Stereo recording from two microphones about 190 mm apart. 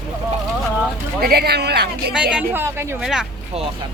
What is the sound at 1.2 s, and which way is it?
Speech, 55° right (ahead or behind).